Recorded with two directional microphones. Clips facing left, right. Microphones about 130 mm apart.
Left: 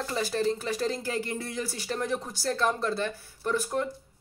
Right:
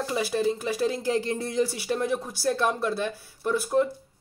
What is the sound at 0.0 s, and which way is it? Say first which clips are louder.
Speech: right 2 dB; 10° right (ahead or behind).